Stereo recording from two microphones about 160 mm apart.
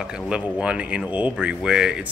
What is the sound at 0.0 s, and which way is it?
Speech, 5° right (ahead or behind).